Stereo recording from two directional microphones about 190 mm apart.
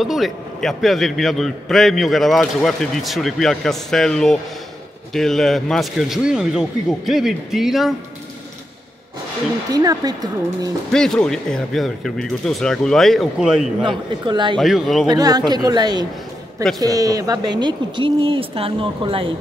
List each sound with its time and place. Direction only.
0.0 s a man's voice: centre (ahead or behind)
9.7 s speech: 20° right (ahead or behind)
10.9 s a man's voice: 5° left (ahead or behind)
13.8 s speech: 25° right (ahead or behind)
14.6 s a man's voice: centre (ahead or behind)
15.0 s speech: 20° right (ahead or behind)